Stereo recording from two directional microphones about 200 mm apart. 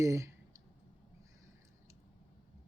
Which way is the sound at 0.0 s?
15° right (ahead or behind).